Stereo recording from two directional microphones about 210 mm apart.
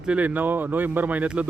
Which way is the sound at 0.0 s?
5° right (ahead or behind).